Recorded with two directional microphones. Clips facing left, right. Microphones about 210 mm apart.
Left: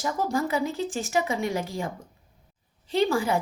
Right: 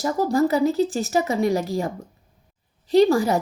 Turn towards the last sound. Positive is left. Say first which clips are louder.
# right 7 dB
turn(degrees=-40)  # may be behind; listen again after turning